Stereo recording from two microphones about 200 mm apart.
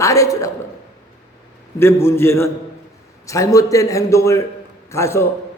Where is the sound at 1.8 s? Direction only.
10° left (ahead or behind).